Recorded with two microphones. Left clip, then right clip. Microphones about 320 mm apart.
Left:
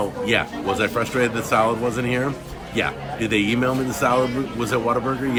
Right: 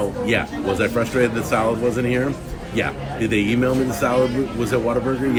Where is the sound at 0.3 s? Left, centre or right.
Centre.